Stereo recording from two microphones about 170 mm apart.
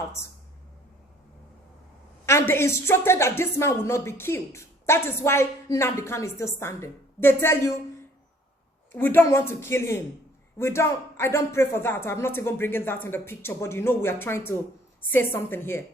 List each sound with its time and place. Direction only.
2.2 s a woman's voice: 15° left (ahead or behind)
8.9 s a woman's voice: 10° left (ahead or behind)